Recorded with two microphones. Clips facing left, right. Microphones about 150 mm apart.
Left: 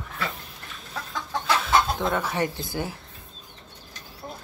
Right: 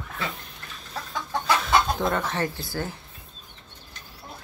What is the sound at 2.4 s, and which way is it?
Speech, 20° left (ahead or behind).